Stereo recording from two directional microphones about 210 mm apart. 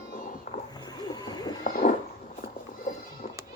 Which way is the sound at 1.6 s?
40° left (ahead or behind).